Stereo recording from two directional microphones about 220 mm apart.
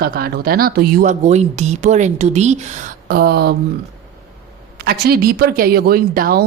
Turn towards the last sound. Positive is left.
turn(degrees=-40)  # may be behind; listen again after turning